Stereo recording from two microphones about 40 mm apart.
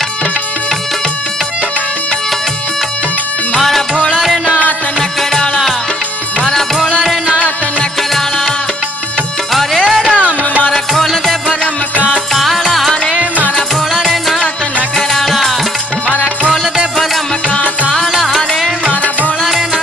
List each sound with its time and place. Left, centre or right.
4.1 s music: centre
7.0 s music: centre
9.5 s music: centre
12.4 s music: centre
17.5 s music: left
18.1 s music: centre